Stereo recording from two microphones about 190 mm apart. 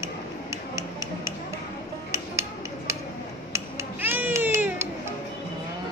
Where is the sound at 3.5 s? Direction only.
15° right (ahead or behind).